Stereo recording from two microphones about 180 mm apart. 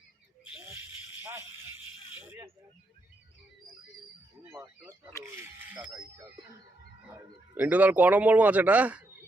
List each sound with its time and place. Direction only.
0.5 s a sound: 10° right (ahead or behind)
4.6 s a man's voice: 20° right (ahead or behind)
7.1 s a man's voice: 10° right (ahead or behind)